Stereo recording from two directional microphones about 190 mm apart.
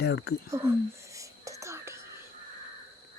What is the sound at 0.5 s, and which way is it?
Whispering, 15° right (ahead or behind).